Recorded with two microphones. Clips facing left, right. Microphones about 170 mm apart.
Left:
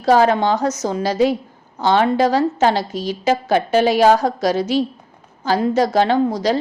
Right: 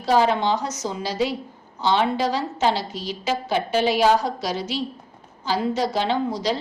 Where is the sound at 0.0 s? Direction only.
45° left (ahead or behind).